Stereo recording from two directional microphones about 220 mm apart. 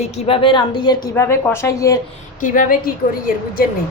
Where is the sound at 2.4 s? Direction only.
35° left (ahead or behind).